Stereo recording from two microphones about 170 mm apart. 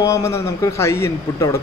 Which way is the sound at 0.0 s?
15° left (ahead or behind).